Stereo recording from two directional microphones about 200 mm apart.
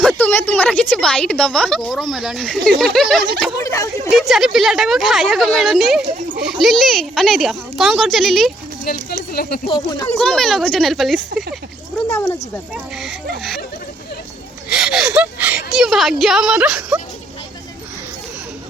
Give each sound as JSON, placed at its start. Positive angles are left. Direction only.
{"t": 0.0, "sound": "a woman's voice", "side_deg": 10}
{"t": 3.6, "sound": "speech", "side_deg": 15}
{"t": 4.1, "sound": "a woman's voice", "side_deg": 0}
{"t": 8.8, "sound": "speech", "side_deg": 50}
{"t": 9.6, "sound": "speech", "side_deg": 20}
{"t": 10.2, "sound": "a woman's voice", "side_deg": 0}
{"t": 12.0, "sound": "speech", "side_deg": 10}
{"t": 12.7, "sound": "a woman's voice", "side_deg": 0}
{"t": 14.7, "sound": "speech", "side_deg": -5}